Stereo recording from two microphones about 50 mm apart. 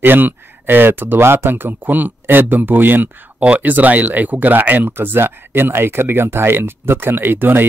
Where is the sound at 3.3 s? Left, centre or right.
Right.